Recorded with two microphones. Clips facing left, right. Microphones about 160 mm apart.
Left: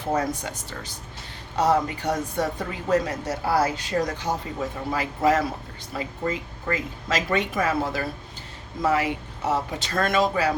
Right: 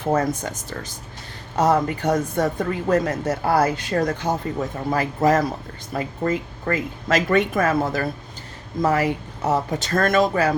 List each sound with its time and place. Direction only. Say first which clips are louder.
0.1 s a woman's voice: right 4 dB; 50° right (ahead or behind)
4.9 s a woman's voice: right 3 dB; 45° right (ahead or behind)